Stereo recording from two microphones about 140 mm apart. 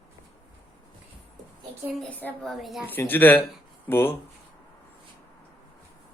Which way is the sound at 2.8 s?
15° left (ahead or behind).